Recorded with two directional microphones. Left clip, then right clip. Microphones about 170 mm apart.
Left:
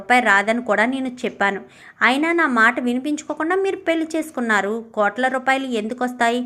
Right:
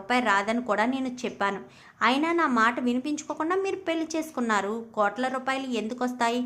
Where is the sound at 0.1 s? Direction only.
15° left (ahead or behind).